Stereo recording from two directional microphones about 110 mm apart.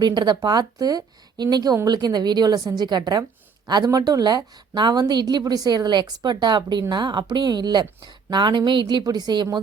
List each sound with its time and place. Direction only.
0.0 s a woman's voice: 40° right (ahead or behind)